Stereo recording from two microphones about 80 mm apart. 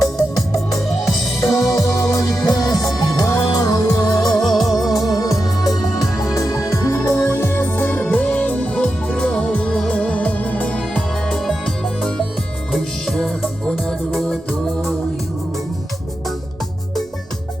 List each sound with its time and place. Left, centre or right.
0.0 s organ: left
1.5 s music: left
4.4 s music: centre
5.0 s music: left; by 12.2 s centre
13.7 s music: centre